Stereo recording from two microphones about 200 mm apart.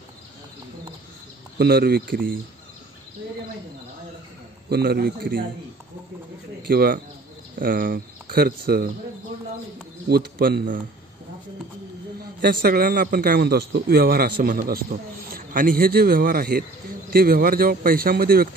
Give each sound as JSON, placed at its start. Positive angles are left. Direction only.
{"t": 1.6, "sound": "a man's voice", "side_deg": -55}
{"t": 4.6, "sound": "a man's voice", "side_deg": -50}
{"t": 6.7, "sound": "a man's voice", "side_deg": -45}
{"t": 10.0, "sound": "a man's voice", "side_deg": -50}
{"t": 12.4, "sound": "a man's voice", "side_deg": -50}